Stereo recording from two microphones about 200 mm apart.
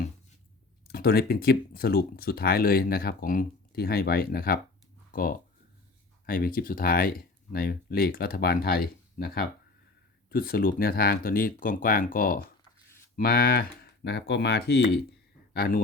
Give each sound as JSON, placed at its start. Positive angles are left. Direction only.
{"t": 0.9, "sound": "speech", "side_deg": 50}